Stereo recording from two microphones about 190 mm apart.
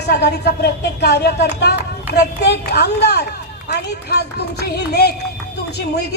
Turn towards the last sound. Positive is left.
turn(degrees=60)  # may be behind; listen again after turning